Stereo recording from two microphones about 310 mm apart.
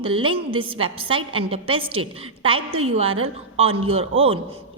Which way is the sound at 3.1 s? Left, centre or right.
Right.